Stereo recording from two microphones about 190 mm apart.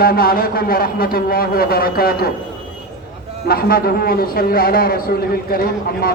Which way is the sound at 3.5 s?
50° left (ahead or behind).